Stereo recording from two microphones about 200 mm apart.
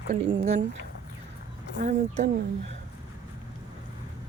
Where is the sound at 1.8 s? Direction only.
35° right (ahead or behind).